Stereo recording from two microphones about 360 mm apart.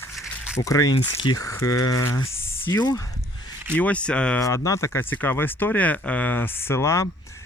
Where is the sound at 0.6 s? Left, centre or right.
Centre.